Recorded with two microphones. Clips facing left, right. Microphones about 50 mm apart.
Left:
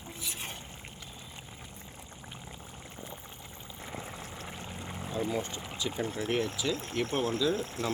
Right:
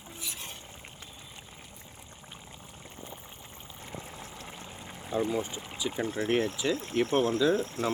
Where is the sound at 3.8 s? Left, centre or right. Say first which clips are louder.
Left 2 dB; centre.